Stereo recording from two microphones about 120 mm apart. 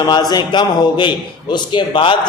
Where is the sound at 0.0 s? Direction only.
35° left (ahead or behind).